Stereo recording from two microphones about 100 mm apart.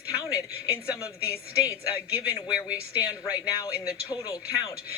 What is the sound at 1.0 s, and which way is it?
Speech, 30° left (ahead or behind).